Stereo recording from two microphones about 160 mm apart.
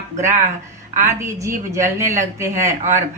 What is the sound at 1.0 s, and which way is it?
Speech, 20° right (ahead or behind).